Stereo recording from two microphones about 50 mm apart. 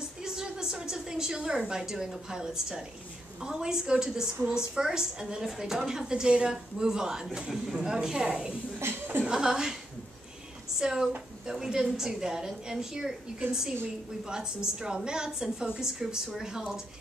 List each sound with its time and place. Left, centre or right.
0.2 s a woman's voice: centre
8.7 s speech: right
9.2 s a woman's voice: centre
10.8 s a woman's voice: centre